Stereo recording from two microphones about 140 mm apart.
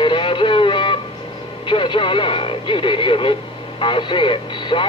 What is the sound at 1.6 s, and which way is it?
Radio, 35° left (ahead or behind).